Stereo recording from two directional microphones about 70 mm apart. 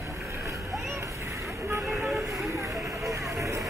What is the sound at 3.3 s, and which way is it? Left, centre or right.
Music, right.